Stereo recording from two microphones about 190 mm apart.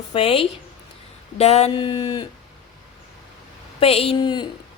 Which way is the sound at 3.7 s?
30° left (ahead or behind).